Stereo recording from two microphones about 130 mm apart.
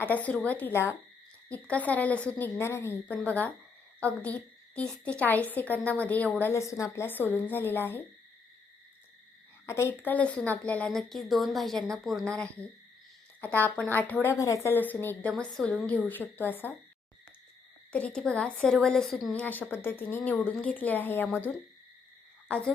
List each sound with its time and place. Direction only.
0.1 s a woman's voice: 10° left (ahead or behind)
9.6 s a woman's voice: 20° left (ahead or behind); by 12.3 s centre (ahead or behind)
13.4 s a woman's voice: 15° left (ahead or behind)
17.9 s a woman's voice: 5° left (ahead or behind)
22.4 s frog: 10° left (ahead or behind)